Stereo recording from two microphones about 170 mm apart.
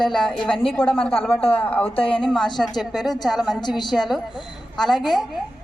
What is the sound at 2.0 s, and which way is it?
Speech, 30° left (ahead or behind).